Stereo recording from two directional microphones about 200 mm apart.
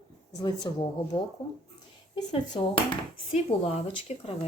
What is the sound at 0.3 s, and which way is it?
Speech, 20° left (ahead or behind).